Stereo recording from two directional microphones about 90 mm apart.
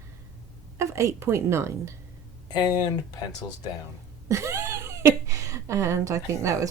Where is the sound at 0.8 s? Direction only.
35° right (ahead or behind).